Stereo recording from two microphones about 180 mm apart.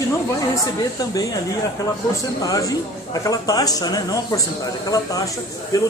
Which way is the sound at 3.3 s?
20° left (ahead or behind).